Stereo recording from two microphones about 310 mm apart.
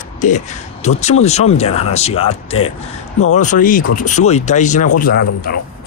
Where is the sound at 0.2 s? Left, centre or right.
Left.